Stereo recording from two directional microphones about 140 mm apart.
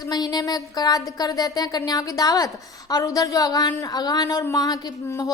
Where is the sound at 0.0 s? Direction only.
30° left (ahead or behind).